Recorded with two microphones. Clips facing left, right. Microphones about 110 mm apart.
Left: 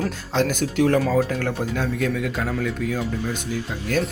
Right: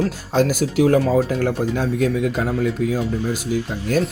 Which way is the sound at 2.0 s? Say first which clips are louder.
Right 4 dB; 25° right (ahead or behind).